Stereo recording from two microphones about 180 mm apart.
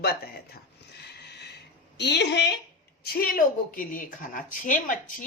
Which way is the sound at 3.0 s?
55° left (ahead or behind).